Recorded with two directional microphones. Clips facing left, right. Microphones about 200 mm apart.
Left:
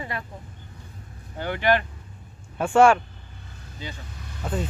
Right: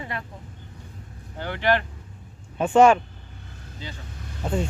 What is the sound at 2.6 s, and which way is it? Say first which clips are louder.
Speech: right 1 dB; 20° right (ahead or behind).